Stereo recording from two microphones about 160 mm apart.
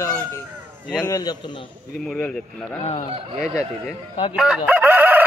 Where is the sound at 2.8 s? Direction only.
45° left (ahead or behind).